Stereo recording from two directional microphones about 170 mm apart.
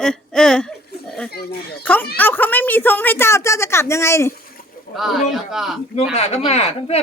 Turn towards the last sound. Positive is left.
turn(degrees=40)  # may be behind; listen again after turning